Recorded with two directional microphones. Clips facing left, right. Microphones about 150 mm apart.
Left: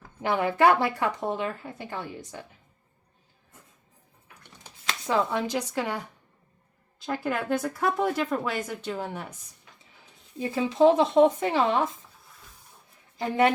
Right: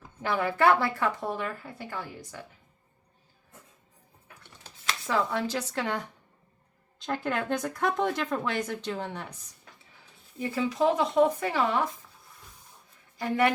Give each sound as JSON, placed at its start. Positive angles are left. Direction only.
{"t": 0.2, "sound": "speech", "side_deg": 20}
{"t": 4.4, "sound": "a sound", "side_deg": 20}
{"t": 7.0, "sound": "a woman's voice", "side_deg": 10}
{"t": 10.3, "sound": "speech", "side_deg": 25}
{"t": 13.1, "sound": "a woman's voice", "side_deg": 25}